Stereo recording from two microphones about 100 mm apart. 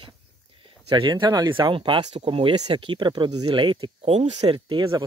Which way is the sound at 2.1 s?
70° right (ahead or behind).